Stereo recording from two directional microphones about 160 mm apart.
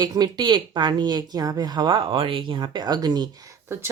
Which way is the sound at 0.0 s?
25° right (ahead or behind).